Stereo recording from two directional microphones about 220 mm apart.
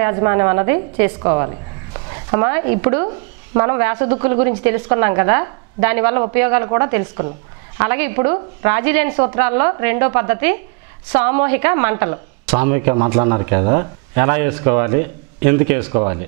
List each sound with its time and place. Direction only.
0.0 s a woman's voice: 15° right (ahead or behind)